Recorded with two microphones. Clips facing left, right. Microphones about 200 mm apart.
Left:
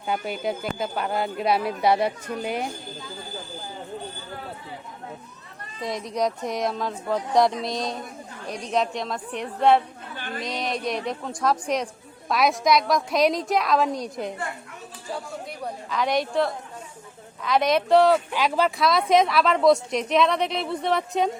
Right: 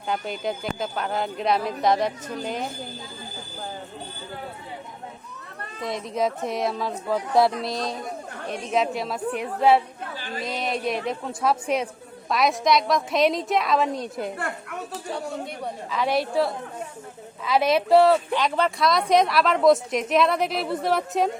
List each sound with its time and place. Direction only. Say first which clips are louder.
0.1 s speech: left 1 dB; 5° left (ahead or behind)
5.8 s a woman's voice: even; centre (ahead or behind)
10.2 s a sound: left 2 dB; 55° left (ahead or behind)
10.4 s a woman's voice: right 1 dB; 5° right (ahead or behind)
14.3 s speech: right 2 dB; 65° right (ahead or behind)
15.6 s a woman's voice: left 1 dB; centre (ahead or behind)